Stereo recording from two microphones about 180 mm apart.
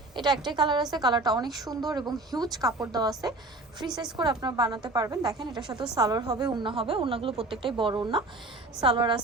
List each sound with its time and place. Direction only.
0.1 s a woman's voice: 25° right (ahead or behind)